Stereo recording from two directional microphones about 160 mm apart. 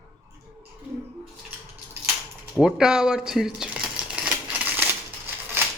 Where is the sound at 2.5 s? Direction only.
5° right (ahead or behind).